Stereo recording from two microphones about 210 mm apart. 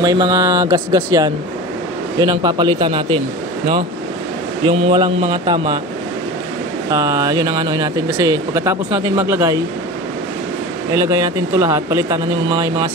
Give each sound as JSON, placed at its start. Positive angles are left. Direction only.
{"t": 0.0, "sound": "speech", "side_deg": -15}
{"t": 4.6, "sound": "speech", "side_deg": -25}
{"t": 6.9, "sound": "speech", "side_deg": -15}
{"t": 10.9, "sound": "speech", "side_deg": -15}